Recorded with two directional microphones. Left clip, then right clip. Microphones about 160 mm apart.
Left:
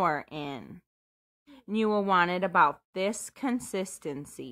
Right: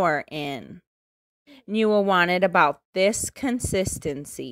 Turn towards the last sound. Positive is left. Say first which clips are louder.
# right 7 dB
turn(degrees=-25)  # may be behind; listen again after turning